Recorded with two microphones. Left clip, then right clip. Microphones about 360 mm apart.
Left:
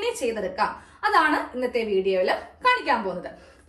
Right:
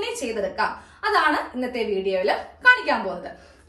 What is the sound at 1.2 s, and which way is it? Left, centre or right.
Speech, centre.